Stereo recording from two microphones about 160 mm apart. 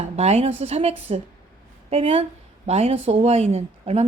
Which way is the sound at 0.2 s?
40° right (ahead or behind).